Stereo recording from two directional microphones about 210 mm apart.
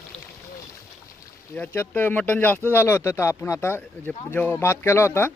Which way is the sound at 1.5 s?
10° left (ahead or behind).